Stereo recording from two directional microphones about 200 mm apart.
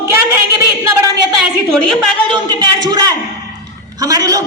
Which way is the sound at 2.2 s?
20° right (ahead or behind).